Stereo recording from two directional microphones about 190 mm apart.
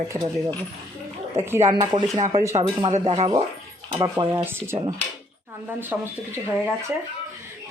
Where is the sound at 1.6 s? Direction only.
25° right (ahead or behind).